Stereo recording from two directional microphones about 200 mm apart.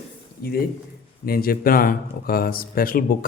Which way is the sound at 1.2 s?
50° left (ahead or behind).